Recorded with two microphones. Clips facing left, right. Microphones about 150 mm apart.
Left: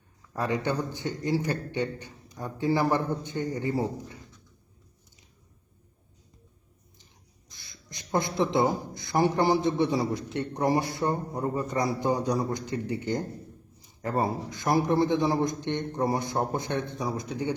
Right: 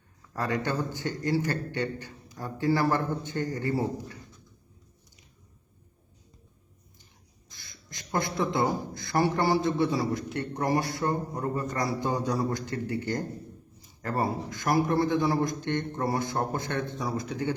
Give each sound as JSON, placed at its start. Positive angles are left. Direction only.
{"t": 0.3, "sound": "a man's voice", "side_deg": 15}
{"t": 7.5, "sound": "speech", "side_deg": 20}